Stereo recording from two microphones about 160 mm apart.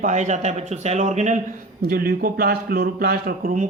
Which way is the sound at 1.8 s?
65° right (ahead or behind).